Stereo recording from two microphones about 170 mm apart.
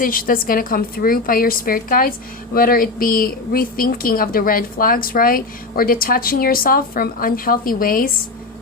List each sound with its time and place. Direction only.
0.0 s a woman's voice: 55° left (ahead or behind)